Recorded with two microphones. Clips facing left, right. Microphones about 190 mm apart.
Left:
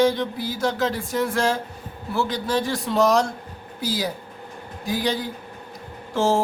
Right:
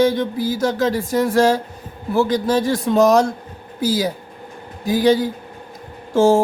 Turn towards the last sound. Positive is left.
turn(degrees=-45)  # may be behind; listen again after turning